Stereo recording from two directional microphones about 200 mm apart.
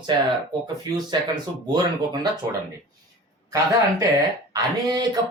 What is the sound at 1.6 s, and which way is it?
Speech, 20° right (ahead or behind).